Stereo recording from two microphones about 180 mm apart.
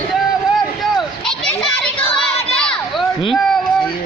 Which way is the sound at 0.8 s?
5° left (ahead or behind).